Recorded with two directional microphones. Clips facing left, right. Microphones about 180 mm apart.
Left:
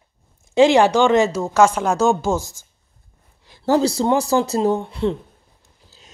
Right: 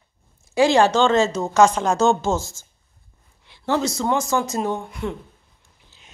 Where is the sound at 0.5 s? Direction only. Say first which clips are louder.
Left 3 dB; 15° left (ahead or behind).